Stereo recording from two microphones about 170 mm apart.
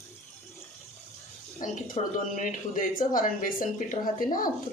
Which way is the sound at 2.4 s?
55° left (ahead or behind).